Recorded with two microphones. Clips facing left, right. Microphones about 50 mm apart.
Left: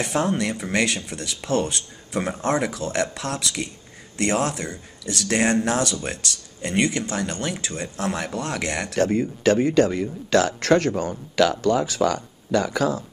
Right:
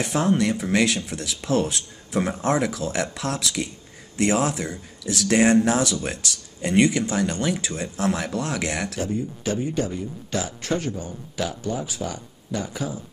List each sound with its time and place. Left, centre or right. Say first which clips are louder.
0.0 s speech: right 1 dB; centre
8.9 s speech: left 6 dB; left